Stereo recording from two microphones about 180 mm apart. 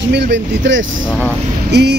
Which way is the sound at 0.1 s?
75° right (ahead or behind).